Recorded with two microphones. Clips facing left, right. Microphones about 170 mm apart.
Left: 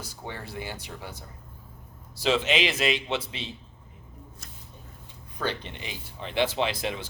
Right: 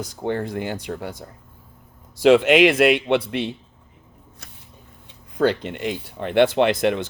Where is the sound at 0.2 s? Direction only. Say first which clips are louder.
Right 13 dB; 55° right (ahead or behind).